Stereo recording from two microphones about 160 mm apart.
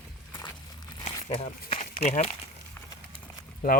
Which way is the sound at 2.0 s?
45° left (ahead or behind).